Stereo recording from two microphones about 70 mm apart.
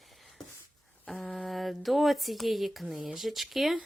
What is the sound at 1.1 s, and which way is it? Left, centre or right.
Speech, centre.